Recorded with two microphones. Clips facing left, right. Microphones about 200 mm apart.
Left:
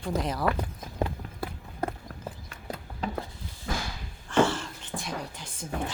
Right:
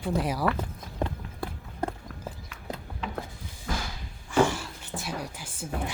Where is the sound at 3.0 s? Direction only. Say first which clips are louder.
Left 3 dB; 35° left (ahead or behind).